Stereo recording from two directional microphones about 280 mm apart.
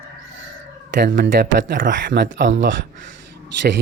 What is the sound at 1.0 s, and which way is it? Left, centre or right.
Speech, right.